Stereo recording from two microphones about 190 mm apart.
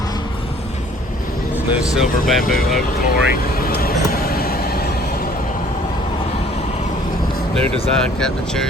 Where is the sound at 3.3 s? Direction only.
55° left (ahead or behind).